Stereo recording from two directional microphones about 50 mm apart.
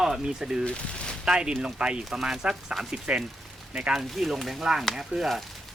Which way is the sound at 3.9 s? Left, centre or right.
Centre.